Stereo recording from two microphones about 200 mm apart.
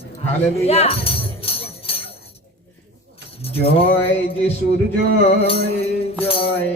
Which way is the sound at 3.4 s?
30° left (ahead or behind).